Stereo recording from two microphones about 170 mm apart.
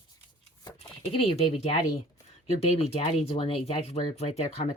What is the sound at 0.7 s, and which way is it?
Speech, 35° left (ahead or behind).